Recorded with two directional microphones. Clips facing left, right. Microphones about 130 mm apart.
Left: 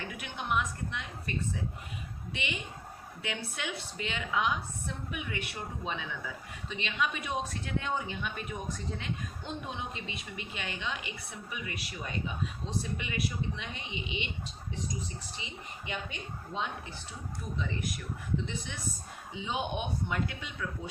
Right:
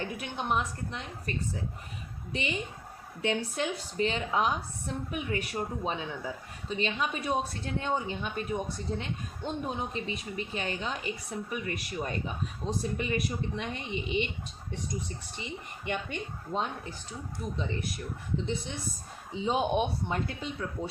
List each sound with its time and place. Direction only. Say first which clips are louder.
0.0 s a woman's voice: right 4 dB; 30° right (ahead or behind)
2.3 s a woman's voice: right 5 dB; 35° right (ahead or behind)
15.4 s a woman's voice: right 4 dB; 55° right (ahead or behind)
17.6 s a woman's voice: even; 30° right (ahead or behind)